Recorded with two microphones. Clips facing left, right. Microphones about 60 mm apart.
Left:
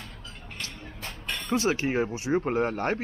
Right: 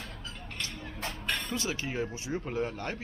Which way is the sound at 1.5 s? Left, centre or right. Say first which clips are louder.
Left 8 dB; left.